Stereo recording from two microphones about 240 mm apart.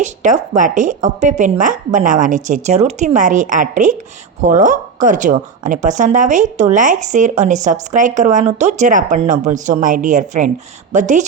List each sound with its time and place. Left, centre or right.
0.0 s a woman's voice: right